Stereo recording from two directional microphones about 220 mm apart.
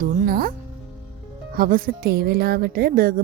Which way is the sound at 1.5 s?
40° right (ahead or behind).